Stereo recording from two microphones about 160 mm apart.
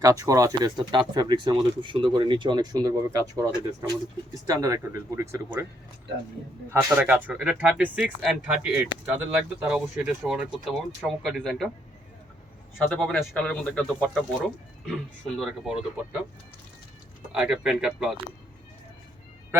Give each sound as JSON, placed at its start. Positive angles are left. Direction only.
{"t": 0.0, "sound": "speech", "side_deg": -20}
{"t": 6.7, "sound": "speech", "side_deg": -10}
{"t": 12.9, "sound": "speech", "side_deg": 5}
{"t": 17.3, "sound": "speech", "side_deg": -5}